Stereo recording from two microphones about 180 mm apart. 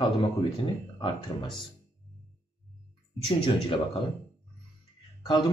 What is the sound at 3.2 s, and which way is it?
Speech, 30° left (ahead or behind).